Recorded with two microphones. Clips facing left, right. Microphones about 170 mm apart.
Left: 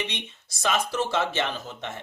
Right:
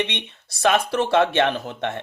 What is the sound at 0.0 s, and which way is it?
Speech, 65° right (ahead or behind).